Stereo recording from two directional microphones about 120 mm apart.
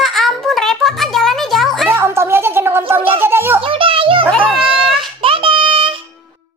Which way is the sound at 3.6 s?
45° right (ahead or behind).